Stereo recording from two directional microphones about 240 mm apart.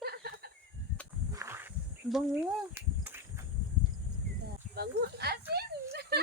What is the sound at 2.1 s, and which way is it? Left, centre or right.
Speech, centre.